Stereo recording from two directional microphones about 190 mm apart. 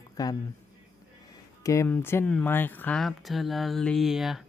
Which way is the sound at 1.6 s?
15° left (ahead or behind).